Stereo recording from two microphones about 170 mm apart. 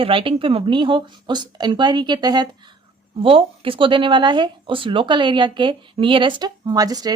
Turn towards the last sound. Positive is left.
turn(degrees=-20)  # may be behind; listen again after turning